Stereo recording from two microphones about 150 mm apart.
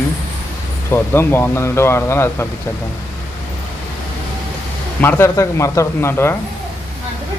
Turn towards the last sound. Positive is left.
turn(degrees=15)  # may be behind; listen again after turning